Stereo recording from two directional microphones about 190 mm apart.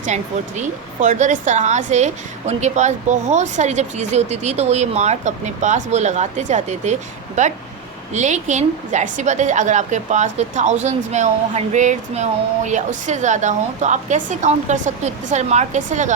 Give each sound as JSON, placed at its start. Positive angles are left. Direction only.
{"t": 0.0, "sound": "a woman's voice", "side_deg": -40}